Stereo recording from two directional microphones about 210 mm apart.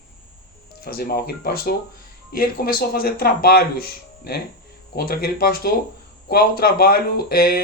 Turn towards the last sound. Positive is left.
turn(degrees=45)  # may be behind; listen again after turning